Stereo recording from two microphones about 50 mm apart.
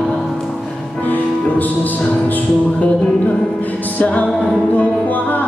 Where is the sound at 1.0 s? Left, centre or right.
Left.